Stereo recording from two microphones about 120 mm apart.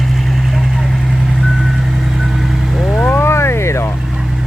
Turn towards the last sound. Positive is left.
turn(degrees=20)  # may be behind; listen again after turning